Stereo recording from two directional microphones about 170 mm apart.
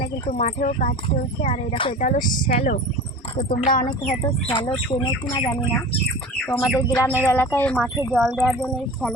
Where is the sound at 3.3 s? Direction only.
60° left (ahead or behind).